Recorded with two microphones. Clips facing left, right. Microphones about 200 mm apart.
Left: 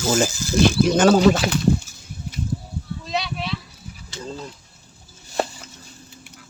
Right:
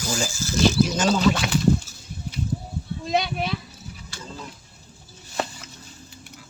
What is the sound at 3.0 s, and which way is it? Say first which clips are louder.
Speech: right 4 dB; 50° right (ahead or behind).